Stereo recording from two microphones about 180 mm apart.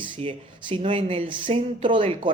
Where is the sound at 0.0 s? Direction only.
30° right (ahead or behind).